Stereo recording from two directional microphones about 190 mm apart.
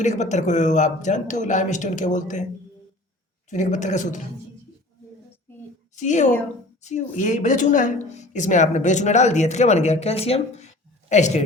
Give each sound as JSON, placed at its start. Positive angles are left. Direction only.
{"t": 0.0, "sound": "a woman's voice", "side_deg": 40}
{"t": 3.5, "sound": "a woman's voice", "side_deg": 40}
{"t": 6.0, "sound": "a woman's voice", "side_deg": 40}